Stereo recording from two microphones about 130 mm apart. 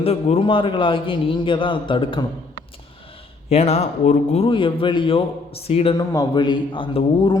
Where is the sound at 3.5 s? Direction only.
55° left (ahead or behind).